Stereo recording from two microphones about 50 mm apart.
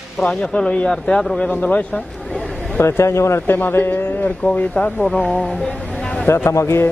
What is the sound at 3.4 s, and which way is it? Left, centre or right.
Speech, left.